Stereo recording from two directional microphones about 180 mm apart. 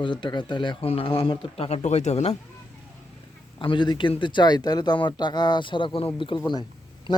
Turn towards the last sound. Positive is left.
turn(degrees=30)  # may be behind; listen again after turning